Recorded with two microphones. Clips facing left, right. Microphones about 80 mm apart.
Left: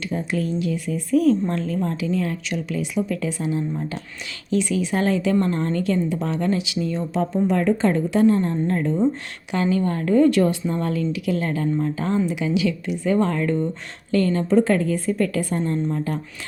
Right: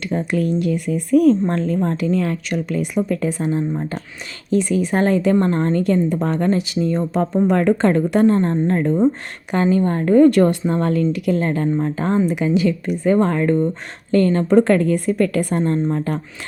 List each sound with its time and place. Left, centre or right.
0.1 s a woman's voice: right
11.1 s a woman's voice: right
14.5 s a woman's voice: right